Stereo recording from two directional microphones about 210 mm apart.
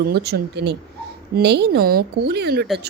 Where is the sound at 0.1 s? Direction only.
50° right (ahead or behind).